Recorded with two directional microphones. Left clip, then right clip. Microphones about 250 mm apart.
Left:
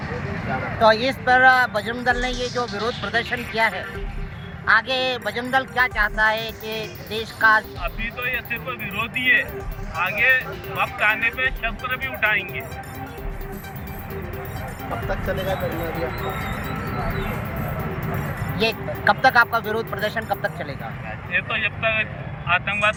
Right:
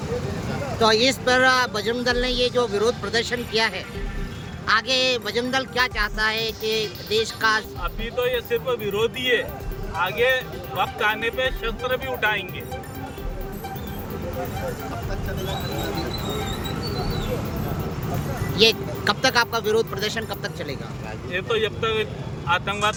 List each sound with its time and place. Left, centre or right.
0.8 s speech: centre
18.6 s speech: centre